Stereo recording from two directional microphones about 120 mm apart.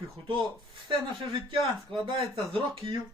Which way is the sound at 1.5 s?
45° right (ahead or behind).